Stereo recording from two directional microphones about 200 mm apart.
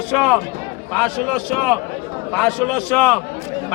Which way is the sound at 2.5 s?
5° left (ahead or behind).